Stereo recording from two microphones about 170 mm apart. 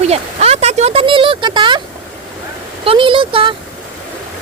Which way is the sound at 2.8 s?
30° right (ahead or behind).